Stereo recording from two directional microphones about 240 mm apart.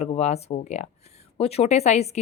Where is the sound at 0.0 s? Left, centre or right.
Left.